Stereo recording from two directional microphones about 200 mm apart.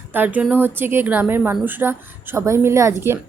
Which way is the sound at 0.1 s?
10° right (ahead or behind).